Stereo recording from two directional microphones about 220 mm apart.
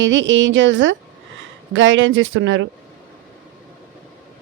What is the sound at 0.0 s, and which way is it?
Speech, 55° right (ahead or behind).